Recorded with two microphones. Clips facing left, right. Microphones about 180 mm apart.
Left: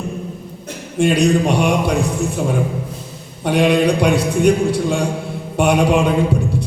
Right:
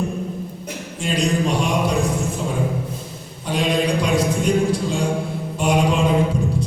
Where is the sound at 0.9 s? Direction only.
65° left (ahead or behind).